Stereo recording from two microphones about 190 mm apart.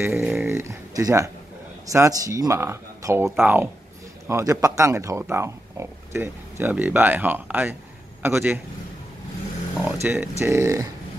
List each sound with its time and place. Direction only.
0.1 s snoring: 5° right (ahead or behind)
1.9 s a man's voice: 15° right (ahead or behind)
9.8 s speech: 10° right (ahead or behind)